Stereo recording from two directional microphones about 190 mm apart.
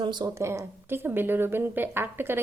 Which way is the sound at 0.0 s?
25° right (ahead or behind).